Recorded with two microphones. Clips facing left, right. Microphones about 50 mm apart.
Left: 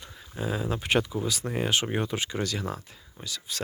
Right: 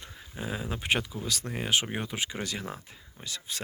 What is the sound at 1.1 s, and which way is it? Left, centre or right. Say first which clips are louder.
Speech: left 5 dB; centre.